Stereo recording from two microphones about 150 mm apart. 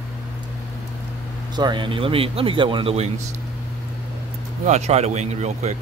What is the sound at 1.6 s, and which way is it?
Speech, 30° right (ahead or behind).